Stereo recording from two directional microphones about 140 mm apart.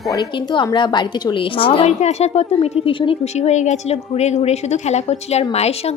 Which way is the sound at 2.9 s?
40° left (ahead or behind).